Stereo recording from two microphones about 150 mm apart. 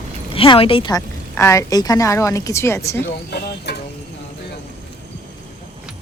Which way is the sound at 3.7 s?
90° left.